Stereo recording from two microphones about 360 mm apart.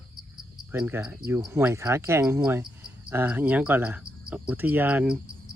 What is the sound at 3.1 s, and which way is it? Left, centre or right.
Speech, centre.